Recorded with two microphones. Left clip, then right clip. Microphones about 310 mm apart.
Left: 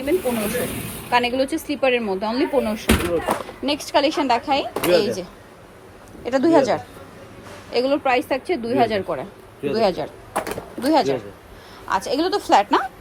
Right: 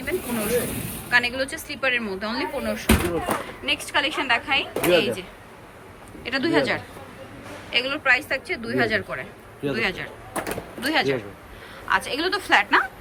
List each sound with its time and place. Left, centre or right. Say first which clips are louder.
0.1 s speech: left 3 dB; centre
1.1 s a woman's voice: left 2 dB; centre
2.7 s speech: left 2 dB; centre
3.7 s a woman's voice: left 4 dB; centre
4.7 s speech: left 1 dB; centre
6.2 s a woman's voice: left 5 dB; centre
10.3 s a sound: left 3 dB; centre
10.9 s a woman's voice: left 4 dB; centre